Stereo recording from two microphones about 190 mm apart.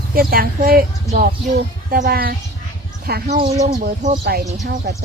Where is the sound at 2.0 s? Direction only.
50° right (ahead or behind).